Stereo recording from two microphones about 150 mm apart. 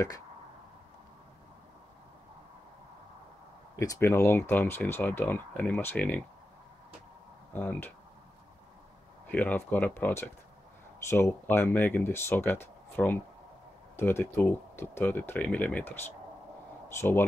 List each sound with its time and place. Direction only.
3.8 s speech: 20° left (ahead or behind)
7.5 s speech: 15° left (ahead or behind)
9.3 s speech: 10° left (ahead or behind)
16.9 s speech: 15° left (ahead or behind)